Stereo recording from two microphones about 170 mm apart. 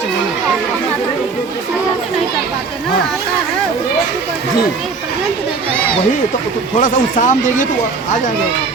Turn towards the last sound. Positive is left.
turn(degrees=50)  # may be behind; listen again after turning